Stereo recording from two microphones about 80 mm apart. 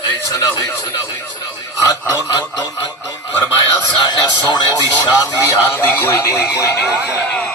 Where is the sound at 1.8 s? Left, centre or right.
Left.